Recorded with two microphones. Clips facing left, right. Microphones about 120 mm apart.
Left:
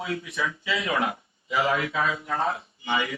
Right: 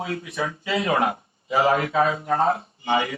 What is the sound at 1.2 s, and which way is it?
A man's voice, 40° right (ahead or behind).